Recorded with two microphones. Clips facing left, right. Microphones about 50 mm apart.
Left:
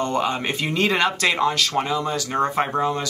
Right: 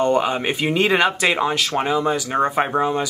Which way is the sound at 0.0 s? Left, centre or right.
Centre.